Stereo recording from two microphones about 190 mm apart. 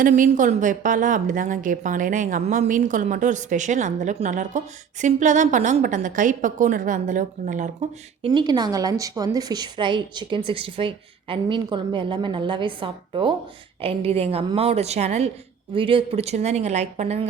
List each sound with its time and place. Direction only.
0.0 s a woman's voice: 45° right (ahead or behind)
8.3 s a woman's voice: 25° right (ahead or behind)